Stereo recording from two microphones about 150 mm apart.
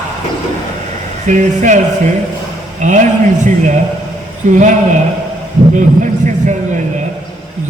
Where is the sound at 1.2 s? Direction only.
55° right (ahead or behind).